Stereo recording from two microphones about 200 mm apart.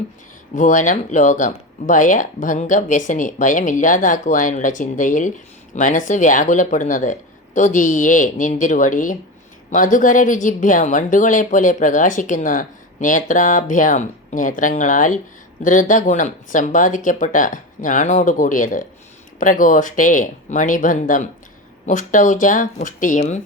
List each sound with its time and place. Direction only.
0.5 s a woman's voice: 40° left (ahead or behind)